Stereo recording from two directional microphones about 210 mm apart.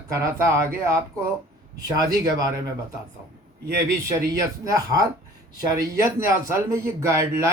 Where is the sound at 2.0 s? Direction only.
20° right (ahead or behind).